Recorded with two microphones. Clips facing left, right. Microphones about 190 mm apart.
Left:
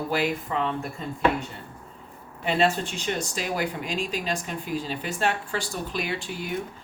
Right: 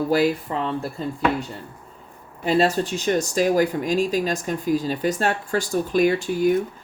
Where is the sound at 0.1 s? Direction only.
35° right (ahead or behind).